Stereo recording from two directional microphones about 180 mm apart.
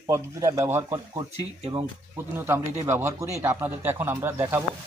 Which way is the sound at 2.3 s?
15° right (ahead or behind).